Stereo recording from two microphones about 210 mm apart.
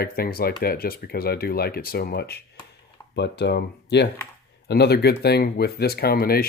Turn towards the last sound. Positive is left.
turn(degrees=45)  # may be behind; listen again after turning